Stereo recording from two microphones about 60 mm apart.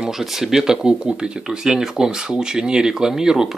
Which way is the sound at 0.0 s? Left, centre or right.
Centre.